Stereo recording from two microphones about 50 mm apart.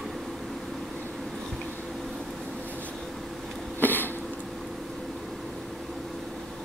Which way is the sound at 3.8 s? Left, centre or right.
Left.